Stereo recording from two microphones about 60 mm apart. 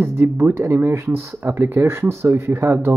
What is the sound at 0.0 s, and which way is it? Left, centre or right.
Speech, right.